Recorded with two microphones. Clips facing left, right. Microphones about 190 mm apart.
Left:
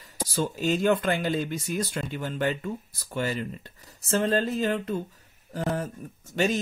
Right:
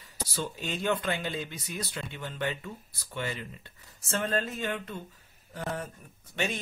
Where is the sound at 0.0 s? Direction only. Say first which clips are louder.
Left 6 dB; 45° left (ahead or behind).